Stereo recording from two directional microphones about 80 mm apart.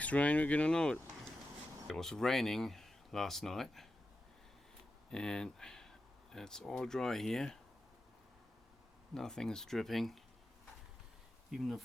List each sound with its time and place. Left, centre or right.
0.0 s speech: centre
5.1 s speech: centre
9.1 s speech: centre
11.5 s speech: centre